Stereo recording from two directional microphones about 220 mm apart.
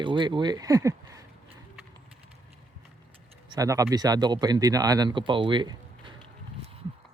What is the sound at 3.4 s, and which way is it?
Speech, 15° right (ahead or behind).